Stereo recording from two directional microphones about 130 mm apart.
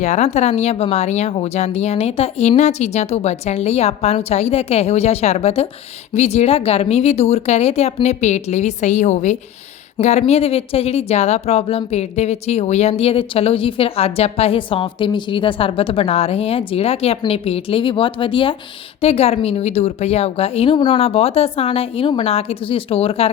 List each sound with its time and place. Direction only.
0.0 s speech: 60° left (ahead or behind)